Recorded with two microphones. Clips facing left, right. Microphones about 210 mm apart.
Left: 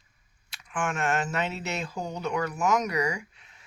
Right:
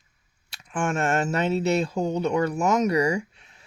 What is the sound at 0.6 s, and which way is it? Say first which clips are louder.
Speech: right 4 dB; 30° right (ahead or behind).